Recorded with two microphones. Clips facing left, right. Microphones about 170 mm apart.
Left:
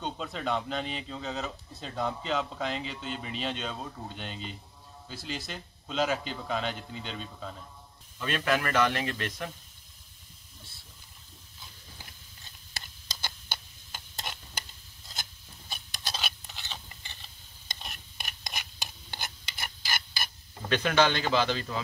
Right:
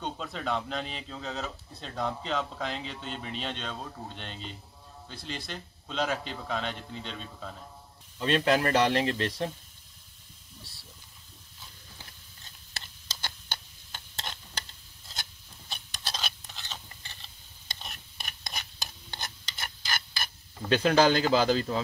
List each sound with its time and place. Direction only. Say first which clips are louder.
0.0 s a man's voice: left 1 dB; centre (ahead or behind)
8.2 s speech: right 4 dB; 30° right (ahead or behind)
12.8 s tick-tock: even; 10° left (ahead or behind)
15.7 s a sound: even; 5° left (ahead or behind)
17.7 s stir: even; centre (ahead or behind)
20.6 s speech: right 3 dB; 30° right (ahead or behind)